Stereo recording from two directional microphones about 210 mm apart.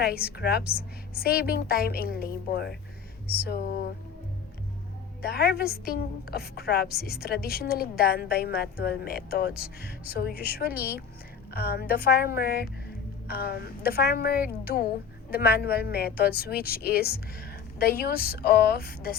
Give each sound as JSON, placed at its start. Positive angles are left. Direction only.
{"t": 0.3, "sound": "a woman's voice", "side_deg": 50}
{"t": 5.2, "sound": "a woman's voice", "side_deg": 50}